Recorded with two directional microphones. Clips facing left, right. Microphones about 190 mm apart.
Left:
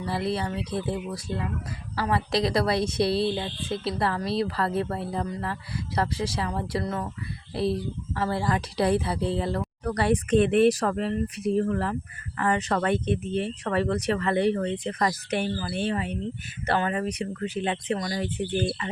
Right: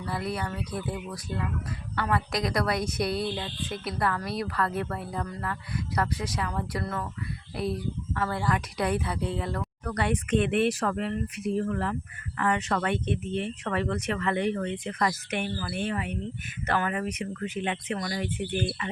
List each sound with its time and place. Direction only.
0.0 s a woman's voice: 30° left (ahead or behind)